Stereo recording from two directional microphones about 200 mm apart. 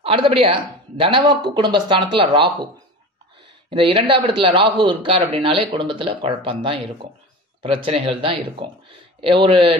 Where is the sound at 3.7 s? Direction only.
25° right (ahead or behind).